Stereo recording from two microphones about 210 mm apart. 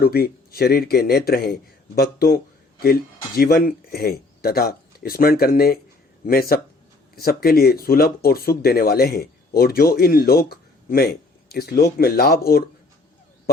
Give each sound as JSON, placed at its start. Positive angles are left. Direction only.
{"t": 0.0, "sound": "speech", "side_deg": 45}